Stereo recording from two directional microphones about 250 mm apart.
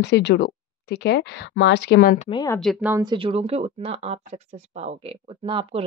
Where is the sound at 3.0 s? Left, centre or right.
Centre.